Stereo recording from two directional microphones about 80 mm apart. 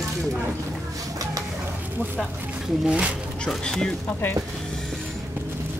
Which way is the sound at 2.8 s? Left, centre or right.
Centre.